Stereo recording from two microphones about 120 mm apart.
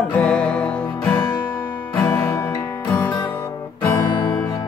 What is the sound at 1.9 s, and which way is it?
Music, 20° left (ahead or behind).